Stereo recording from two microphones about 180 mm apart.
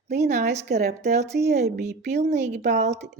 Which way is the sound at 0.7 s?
60° right (ahead or behind).